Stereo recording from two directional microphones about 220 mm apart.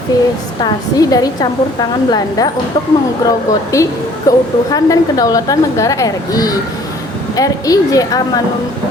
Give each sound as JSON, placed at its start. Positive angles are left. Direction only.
{"t": 0.1, "sound": "a woman's voice", "side_deg": 15}